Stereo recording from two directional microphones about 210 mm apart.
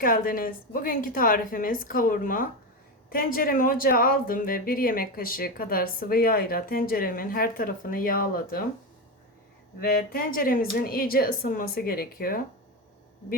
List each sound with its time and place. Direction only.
0.0 s a woman's voice: 40° left (ahead or behind)
9.8 s speech: 45° left (ahead or behind)